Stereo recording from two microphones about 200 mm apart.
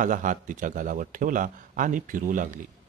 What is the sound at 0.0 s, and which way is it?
Speech, 40° right (ahead or behind).